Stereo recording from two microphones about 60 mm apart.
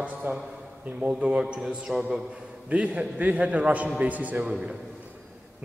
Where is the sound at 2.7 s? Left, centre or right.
Right.